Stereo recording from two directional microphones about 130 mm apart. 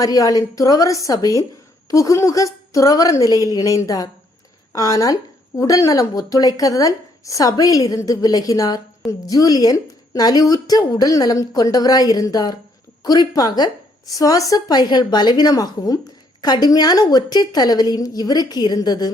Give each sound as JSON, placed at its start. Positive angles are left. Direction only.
{"t": 0.0, "sound": "a woman's voice", "side_deg": 25}